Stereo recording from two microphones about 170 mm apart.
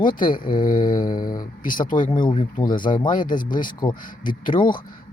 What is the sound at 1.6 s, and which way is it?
Speech, 55° left (ahead or behind).